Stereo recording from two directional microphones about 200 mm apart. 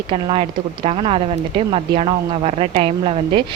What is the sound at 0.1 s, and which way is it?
A woman's voice, 25° right (ahead or behind).